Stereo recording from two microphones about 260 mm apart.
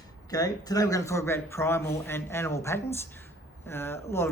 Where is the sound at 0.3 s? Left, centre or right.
Centre.